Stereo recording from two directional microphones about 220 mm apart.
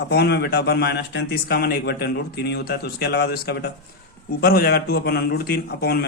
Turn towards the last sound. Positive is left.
turn(degrees=45)  # may be behind; listen again after turning